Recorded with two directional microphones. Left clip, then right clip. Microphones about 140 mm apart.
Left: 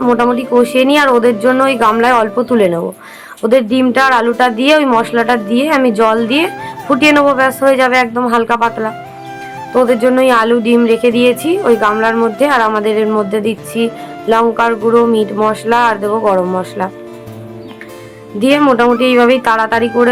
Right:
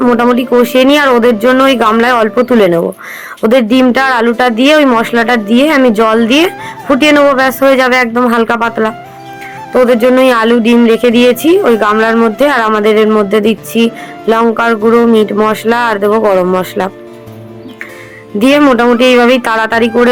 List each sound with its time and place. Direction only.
0.3 s speech: 30° right (ahead or behind)
18.3 s speech: 30° right (ahead or behind)